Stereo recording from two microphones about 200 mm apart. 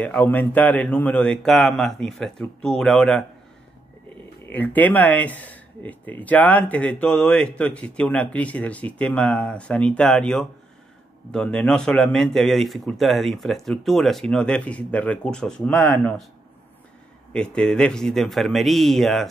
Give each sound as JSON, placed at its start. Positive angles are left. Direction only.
{"t": 0.0, "sound": "speech", "side_deg": 10}
{"t": 4.5, "sound": "speech", "side_deg": 10}
{"t": 17.3, "sound": "speech", "side_deg": 5}